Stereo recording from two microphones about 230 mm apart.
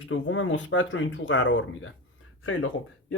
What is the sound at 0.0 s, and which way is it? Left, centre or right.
Speech, left.